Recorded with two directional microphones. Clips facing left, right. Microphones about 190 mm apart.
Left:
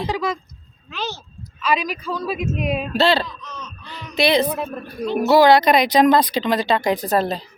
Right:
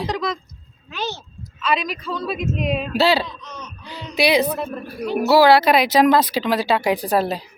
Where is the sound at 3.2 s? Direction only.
15° right (ahead or behind).